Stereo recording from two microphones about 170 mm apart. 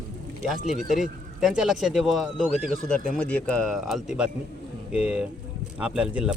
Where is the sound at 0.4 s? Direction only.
Centre (ahead or behind).